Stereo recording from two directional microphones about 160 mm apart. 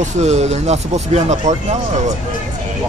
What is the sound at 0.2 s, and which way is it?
Speech, 45° right (ahead or behind).